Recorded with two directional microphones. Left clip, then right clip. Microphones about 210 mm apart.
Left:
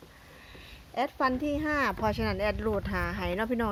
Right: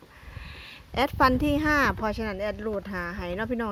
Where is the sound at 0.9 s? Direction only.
35° right (ahead or behind).